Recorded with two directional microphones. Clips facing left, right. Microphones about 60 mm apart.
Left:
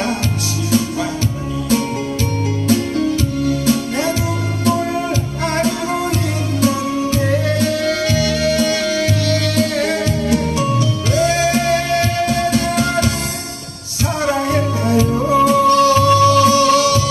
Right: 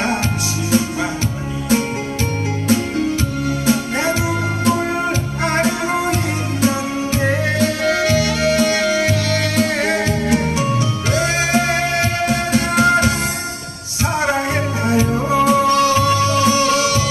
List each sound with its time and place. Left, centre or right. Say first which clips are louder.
0.7 s music: left 1 dB; right
2.7 s music: left 1 dB; right